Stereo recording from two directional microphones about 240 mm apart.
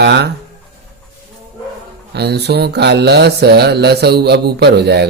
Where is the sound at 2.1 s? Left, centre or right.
Right.